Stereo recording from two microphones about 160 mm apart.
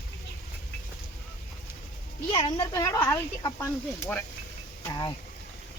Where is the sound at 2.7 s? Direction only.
20° left (ahead or behind).